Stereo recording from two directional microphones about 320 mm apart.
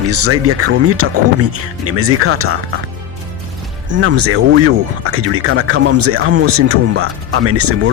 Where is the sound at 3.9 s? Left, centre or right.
Right.